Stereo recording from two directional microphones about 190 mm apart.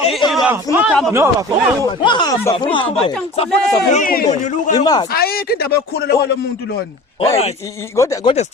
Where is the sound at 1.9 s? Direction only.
25° left (ahead or behind).